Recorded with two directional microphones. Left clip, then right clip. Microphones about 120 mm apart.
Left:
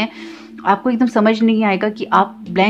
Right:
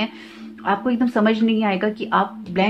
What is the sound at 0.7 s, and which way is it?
A woman's voice, 45° left (ahead or behind).